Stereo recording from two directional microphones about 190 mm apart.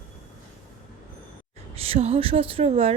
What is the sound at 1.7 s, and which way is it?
Speech, 30° right (ahead or behind).